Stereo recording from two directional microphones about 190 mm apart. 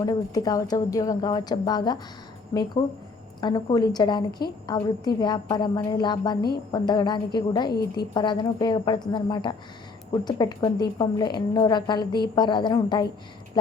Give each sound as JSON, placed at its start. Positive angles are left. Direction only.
{"t": 0.0, "sound": "a woman's voice", "side_deg": 20}